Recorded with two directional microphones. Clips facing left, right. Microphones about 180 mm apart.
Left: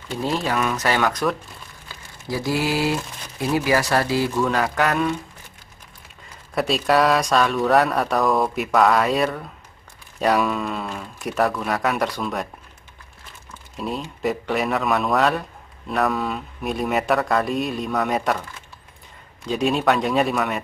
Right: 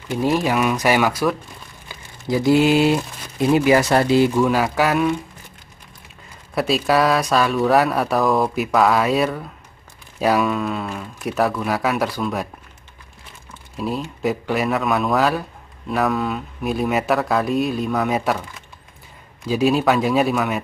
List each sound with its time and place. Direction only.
0.1 s speech: 15° right (ahead or behind)
1.9 s speech: 20° right (ahead or behind)
6.5 s speech: centre (ahead or behind)
13.7 s speech: centre (ahead or behind)